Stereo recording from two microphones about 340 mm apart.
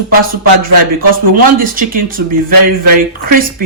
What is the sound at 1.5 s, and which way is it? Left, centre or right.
Speech, right.